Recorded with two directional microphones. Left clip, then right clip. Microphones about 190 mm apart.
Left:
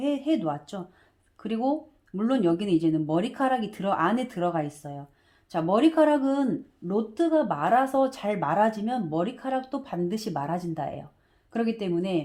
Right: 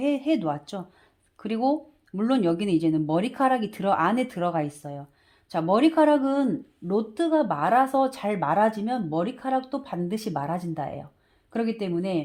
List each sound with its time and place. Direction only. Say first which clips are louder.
0.0 s speech: right 2 dB; 30° right (ahead or behind)